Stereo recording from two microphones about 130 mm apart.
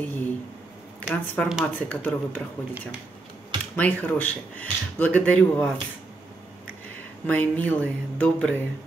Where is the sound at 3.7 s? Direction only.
15° left (ahead or behind).